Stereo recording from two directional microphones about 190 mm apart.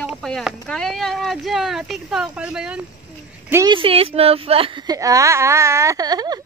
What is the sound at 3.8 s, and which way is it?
Speech, 30° right (ahead or behind).